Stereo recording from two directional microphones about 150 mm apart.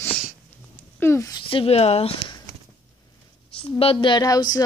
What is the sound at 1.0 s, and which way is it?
Speech, 20° left (ahead or behind).